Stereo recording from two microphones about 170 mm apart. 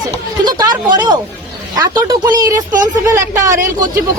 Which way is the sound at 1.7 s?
25° right (ahead or behind).